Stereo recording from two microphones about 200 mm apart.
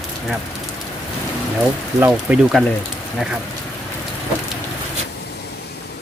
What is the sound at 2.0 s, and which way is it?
Speech, 5° right (ahead or behind).